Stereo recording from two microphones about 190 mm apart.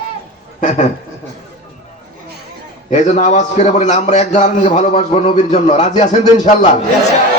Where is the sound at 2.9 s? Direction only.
35° left (ahead or behind).